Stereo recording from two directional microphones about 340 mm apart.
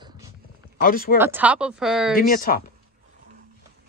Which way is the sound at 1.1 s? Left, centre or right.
Centre.